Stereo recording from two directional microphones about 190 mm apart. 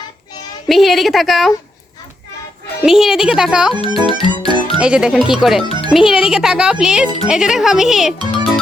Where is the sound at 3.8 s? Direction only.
25° right (ahead or behind).